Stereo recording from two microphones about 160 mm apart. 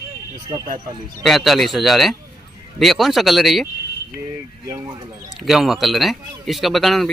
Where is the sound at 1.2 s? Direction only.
Centre (ahead or behind).